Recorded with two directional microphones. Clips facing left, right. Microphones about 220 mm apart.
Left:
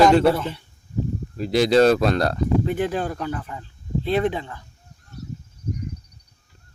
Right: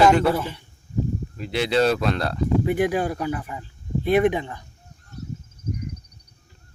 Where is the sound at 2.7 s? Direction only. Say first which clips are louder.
Right 2 dB; 10° right (ahead or behind).